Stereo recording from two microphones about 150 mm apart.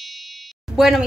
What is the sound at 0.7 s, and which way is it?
Speech, centre (ahead or behind).